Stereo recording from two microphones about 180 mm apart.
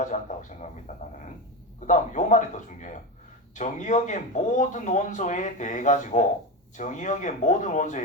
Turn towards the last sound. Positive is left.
turn(degrees=45)  # may be behind; listen again after turning